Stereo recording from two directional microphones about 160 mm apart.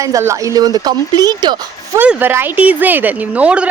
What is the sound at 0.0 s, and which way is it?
Speech, 20° right (ahead or behind).